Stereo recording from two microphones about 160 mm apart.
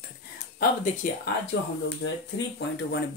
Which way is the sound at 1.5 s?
90° left.